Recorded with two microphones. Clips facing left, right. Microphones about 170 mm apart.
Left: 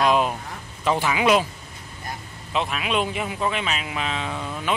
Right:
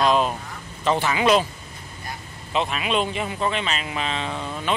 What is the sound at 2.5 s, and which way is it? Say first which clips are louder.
Speech: right 1 dB; centre (ahead or behind).